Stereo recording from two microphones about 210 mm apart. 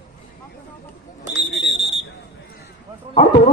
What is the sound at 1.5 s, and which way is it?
Smoke detector, 55° left (ahead or behind).